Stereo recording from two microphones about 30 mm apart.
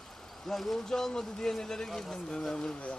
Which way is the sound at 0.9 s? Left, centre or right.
Centre.